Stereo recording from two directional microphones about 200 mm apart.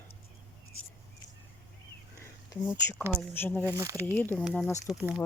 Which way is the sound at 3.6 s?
15° right (ahead or behind).